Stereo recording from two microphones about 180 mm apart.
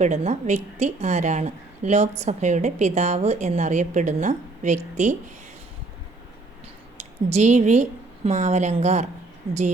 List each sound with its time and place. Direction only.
0.0 s a woman's voice: 40° right (ahead or behind)
7.3 s a woman's voice: 40° right (ahead or behind)